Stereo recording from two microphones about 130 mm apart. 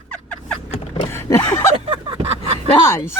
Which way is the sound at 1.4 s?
20° left (ahead or behind).